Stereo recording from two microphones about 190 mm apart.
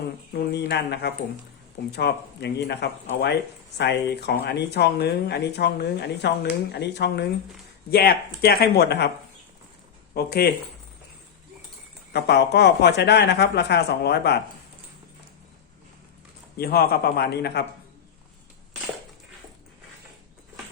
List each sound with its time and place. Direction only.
0.3 s speech: 60° left (ahead or behind)
10.2 s speech: 55° left (ahead or behind)
12.1 s speech: 60° left (ahead or behind)
16.6 s speech: 55° left (ahead or behind)